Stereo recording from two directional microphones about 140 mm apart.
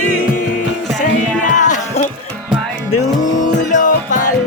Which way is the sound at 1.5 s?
60° left (ahead or behind).